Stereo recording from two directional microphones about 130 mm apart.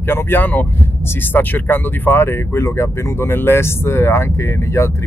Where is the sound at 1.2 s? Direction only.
15° left (ahead or behind).